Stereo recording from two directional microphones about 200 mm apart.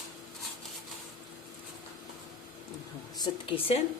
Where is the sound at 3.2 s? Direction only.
25° left (ahead or behind).